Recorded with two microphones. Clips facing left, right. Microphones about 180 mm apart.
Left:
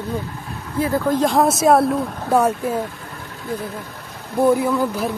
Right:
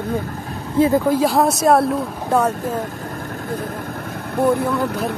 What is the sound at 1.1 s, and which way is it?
Speech, 5° right (ahead or behind).